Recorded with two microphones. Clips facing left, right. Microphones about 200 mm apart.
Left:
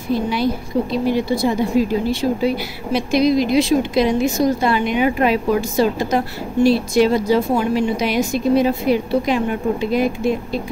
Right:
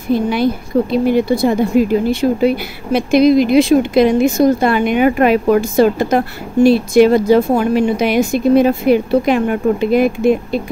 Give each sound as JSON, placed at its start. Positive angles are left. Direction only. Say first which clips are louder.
{"t": 0.1, "sound": "speech", "louder": "right 4 dB", "side_deg": -55}